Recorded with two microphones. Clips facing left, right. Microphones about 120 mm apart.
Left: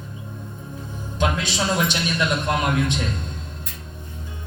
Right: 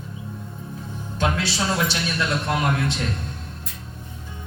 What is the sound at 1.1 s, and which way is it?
A man's voice, 15° left (ahead or behind).